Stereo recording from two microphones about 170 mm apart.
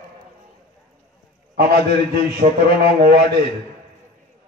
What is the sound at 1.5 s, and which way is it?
A man's voice, 70° right (ahead or behind).